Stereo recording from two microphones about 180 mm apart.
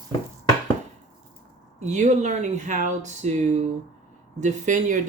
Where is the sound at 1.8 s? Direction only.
40° right (ahead or behind).